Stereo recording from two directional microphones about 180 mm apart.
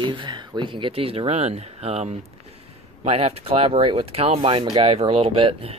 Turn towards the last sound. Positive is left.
turn(degrees=-30)  # may be behind; listen again after turning